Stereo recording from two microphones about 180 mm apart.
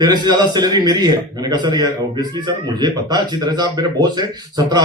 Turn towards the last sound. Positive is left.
turn(degrees=-20)  # may be behind; listen again after turning